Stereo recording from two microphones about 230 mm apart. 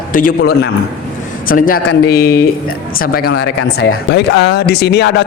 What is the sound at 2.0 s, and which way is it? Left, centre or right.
A man's voice, left.